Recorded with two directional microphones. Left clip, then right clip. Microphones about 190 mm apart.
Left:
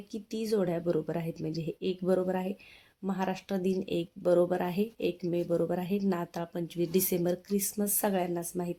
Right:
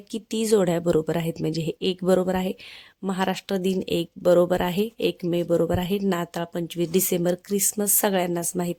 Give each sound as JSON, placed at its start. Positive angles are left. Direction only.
{"t": 0.1, "sound": "speech", "side_deg": -45}